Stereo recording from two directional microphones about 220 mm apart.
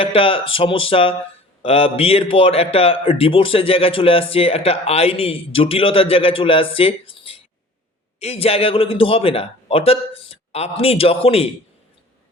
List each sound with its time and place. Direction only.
0.0 s a man's voice: 25° left (ahead or behind)